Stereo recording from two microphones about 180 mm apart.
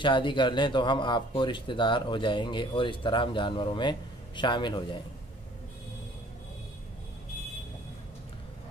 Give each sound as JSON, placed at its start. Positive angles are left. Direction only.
{"t": 0.0, "sound": "speech", "side_deg": 25}